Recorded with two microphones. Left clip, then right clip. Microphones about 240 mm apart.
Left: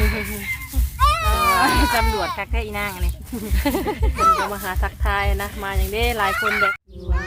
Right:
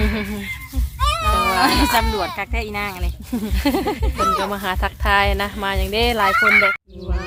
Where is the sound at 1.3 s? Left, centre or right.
Right.